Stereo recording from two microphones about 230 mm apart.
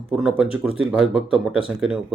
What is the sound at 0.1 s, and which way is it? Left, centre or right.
Speech, centre.